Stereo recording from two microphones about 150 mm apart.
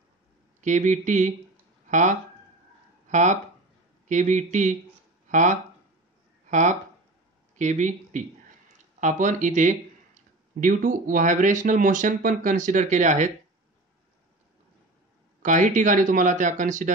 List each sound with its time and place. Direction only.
0.6 s speech: 55° right (ahead or behind)
15.4 s speech: 60° right (ahead or behind)